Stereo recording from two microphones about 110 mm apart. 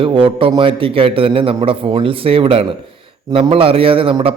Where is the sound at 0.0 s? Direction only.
55° right (ahead or behind).